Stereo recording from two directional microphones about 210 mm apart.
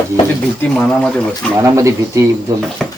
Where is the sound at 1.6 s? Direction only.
15° right (ahead or behind).